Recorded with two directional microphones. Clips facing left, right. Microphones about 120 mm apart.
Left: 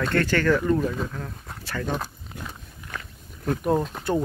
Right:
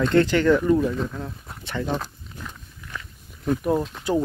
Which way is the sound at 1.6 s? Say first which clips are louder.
Right 2 dB; 20° right (ahead or behind).